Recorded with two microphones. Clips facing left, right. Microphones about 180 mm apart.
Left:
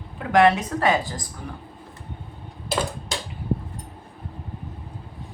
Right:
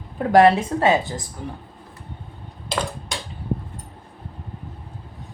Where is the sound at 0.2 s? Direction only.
35° right (ahead or behind).